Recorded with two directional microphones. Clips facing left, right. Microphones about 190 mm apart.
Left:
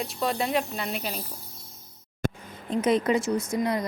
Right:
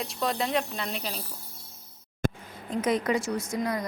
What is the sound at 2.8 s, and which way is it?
Speech, 25° left (ahead or behind).